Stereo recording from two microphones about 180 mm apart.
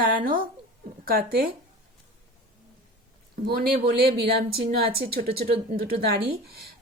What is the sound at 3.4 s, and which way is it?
A woman's voice, 55° right (ahead or behind).